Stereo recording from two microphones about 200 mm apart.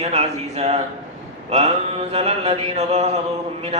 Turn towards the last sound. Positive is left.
turn(degrees=-35)  # may be behind; listen again after turning